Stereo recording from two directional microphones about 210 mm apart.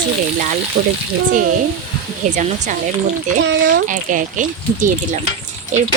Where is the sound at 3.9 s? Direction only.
40° right (ahead or behind).